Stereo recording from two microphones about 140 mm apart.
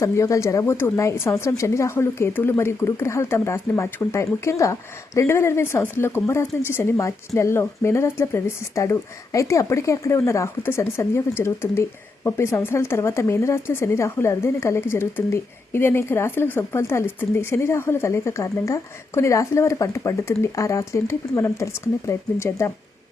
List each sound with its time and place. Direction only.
0.0 s speech: 20° left (ahead or behind)